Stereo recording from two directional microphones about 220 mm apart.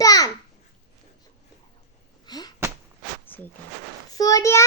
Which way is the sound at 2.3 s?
20° left (ahead or behind).